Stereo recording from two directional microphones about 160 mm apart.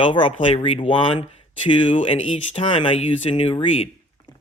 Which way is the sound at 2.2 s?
45° left (ahead or behind).